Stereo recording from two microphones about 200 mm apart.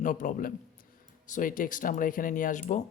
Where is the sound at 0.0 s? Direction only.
40° left (ahead or behind).